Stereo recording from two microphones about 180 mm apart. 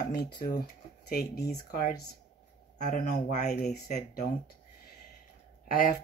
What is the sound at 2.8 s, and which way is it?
Speech, 45° left (ahead or behind).